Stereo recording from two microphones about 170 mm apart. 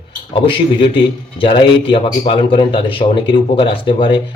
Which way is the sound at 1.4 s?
30° left (ahead or behind).